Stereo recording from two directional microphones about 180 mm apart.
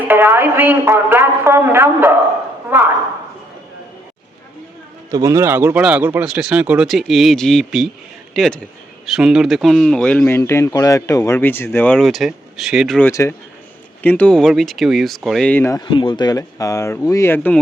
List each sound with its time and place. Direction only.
0.0 s speech: 10° right (ahead or behind)
5.1 s speech: 15° right (ahead or behind)
13.0 s speech: 15° left (ahead or behind)
15.9 s speech: 25° left (ahead or behind); by 17.6 s 10° left (ahead or behind)